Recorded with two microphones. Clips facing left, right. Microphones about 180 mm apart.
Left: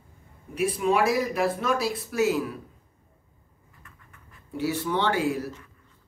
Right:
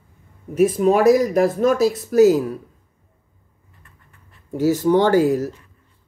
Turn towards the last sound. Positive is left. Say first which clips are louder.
# right 9 dB
turn(degrees=-40)  # may be behind; listen again after turning